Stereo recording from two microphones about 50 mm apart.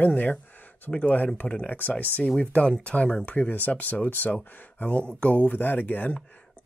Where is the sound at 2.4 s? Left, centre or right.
Left.